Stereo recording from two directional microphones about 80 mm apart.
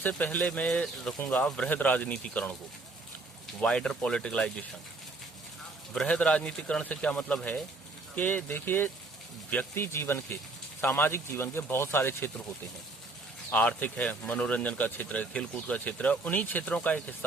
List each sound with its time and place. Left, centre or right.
0.2 s a man's voice: left
3.6 s a man's voice: centre
5.9 s a man's voice: centre
8.1 s speech: left
13.5 s speech: centre